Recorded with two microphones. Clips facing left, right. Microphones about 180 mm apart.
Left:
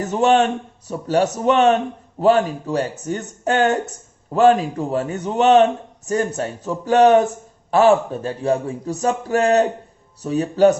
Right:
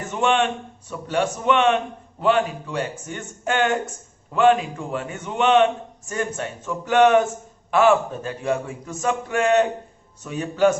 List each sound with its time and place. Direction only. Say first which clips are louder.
0.0 s speech: left 5 dB; 40° left (ahead or behind)